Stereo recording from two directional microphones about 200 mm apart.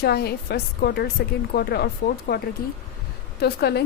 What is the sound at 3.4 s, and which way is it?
Speech, 55° left (ahead or behind).